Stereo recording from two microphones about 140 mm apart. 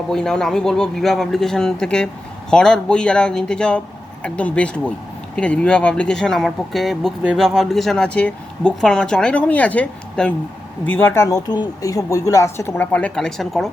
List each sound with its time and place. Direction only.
0.1 s a woman's voice: 5° left (ahead or behind)